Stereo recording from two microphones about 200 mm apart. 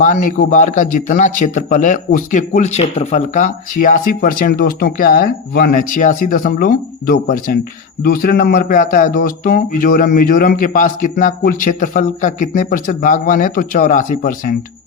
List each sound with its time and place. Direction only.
0.0 s a man's voice: 40° left (ahead or behind)